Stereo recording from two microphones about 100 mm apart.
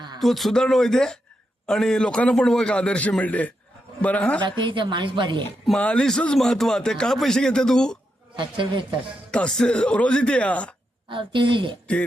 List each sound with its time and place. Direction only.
0.2 s speech: centre (ahead or behind)
4.4 s a woman's voice: 50° right (ahead or behind)
5.6 s speech: 10° left (ahead or behind)
8.4 s speech: 55° right (ahead or behind)
9.3 s speech: 10° left (ahead or behind)
11.1 s speech: 55° right (ahead or behind)